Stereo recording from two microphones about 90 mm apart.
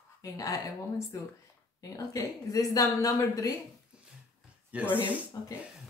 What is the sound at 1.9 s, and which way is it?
Speech, 40° left (ahead or behind).